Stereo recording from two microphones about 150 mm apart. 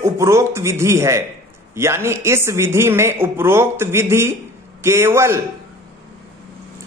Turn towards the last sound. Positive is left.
turn(degrees=-15)  # may be behind; listen again after turning